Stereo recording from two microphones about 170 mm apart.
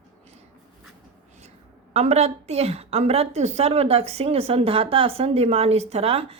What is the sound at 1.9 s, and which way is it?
A woman's voice, 40° right (ahead or behind).